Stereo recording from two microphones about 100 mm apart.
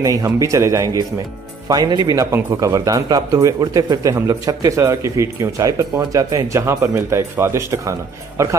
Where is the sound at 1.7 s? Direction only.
40° right (ahead or behind).